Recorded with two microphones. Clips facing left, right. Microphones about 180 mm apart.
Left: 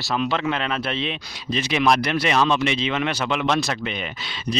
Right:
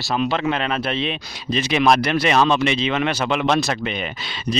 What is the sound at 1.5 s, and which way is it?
Speech, 75° right (ahead or behind).